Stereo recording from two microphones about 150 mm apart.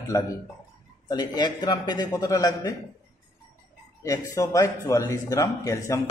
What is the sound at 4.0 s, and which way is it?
Speech, 20° left (ahead or behind).